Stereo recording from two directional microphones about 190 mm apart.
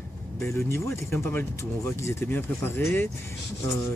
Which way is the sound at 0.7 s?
15° left (ahead or behind).